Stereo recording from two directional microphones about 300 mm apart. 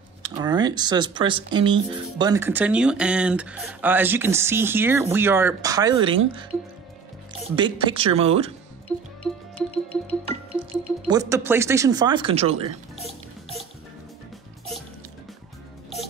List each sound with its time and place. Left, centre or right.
0.2 s speech: centre
7.5 s speech: centre
8.8 s music: centre
10.6 s music: centre
11.1 s speech: centre